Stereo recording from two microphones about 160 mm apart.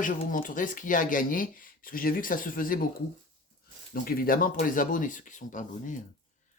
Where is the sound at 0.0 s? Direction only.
60° left (ahead or behind).